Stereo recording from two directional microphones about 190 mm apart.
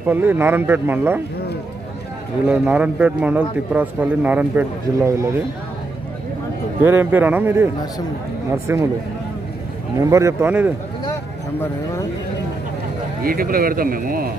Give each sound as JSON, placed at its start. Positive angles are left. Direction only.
{"t": 0.0, "sound": "a man's voice", "side_deg": -10}
{"t": 2.4, "sound": "a man's voice", "side_deg": -5}
{"t": 6.8, "sound": "a man's voice", "side_deg": -10}
{"t": 9.9, "sound": "a man's voice", "side_deg": -15}
{"t": 13.2, "sound": "speech", "side_deg": -50}